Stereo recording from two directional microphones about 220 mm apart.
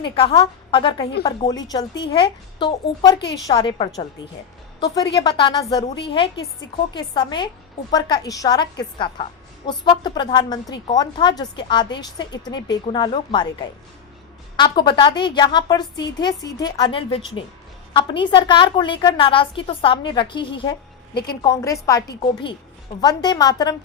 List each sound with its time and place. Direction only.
0.0 s a woman's voice: 25° left (ahead or behind)
5.1 s a woman's voice: 20° left (ahead or behind)
9.6 s a woman's voice: 20° left (ahead or behind)
14.5 s a woman's voice: 20° left (ahead or behind)